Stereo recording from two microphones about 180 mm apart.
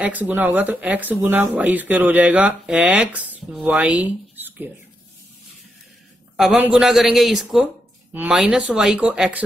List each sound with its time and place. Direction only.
0.0 s speech: 10° right (ahead or behind)
6.3 s speech: 5° right (ahead or behind)